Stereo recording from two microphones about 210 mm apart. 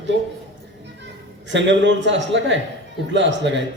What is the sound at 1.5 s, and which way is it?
Speech, 60° right (ahead or behind).